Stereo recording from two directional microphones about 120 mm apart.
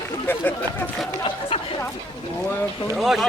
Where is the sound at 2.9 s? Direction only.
5° right (ahead or behind).